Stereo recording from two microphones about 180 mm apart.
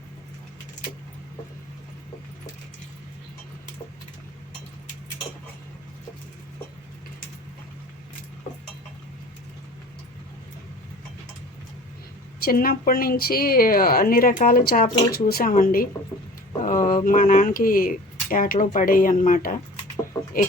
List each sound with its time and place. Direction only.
12.5 s a woman's voice: 55° left (ahead or behind)